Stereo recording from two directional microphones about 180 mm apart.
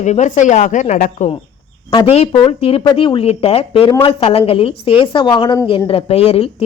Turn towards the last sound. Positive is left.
turn(degrees=35)  # may be behind; listen again after turning